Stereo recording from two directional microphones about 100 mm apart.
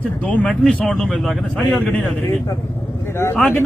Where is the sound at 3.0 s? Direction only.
25° left (ahead or behind).